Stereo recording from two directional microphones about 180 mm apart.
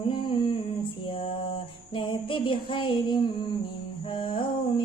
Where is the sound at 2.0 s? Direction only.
30° left (ahead or behind).